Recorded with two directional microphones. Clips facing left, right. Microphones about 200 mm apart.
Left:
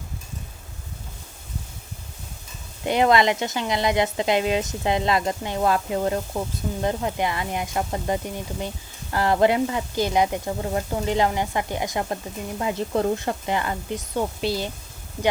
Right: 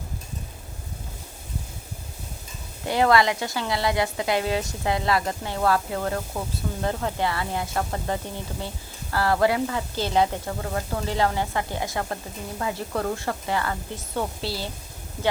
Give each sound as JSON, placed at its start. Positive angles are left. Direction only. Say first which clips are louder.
{"t": 2.8, "sound": "a woman's voice", "louder": "left 2 dB", "side_deg": 20}